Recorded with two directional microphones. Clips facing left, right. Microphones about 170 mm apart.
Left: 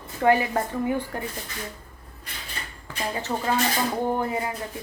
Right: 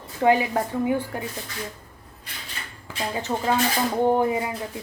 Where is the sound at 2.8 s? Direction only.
15° right (ahead or behind).